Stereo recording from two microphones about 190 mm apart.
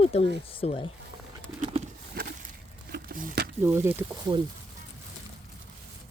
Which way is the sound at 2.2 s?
50° right (ahead or behind).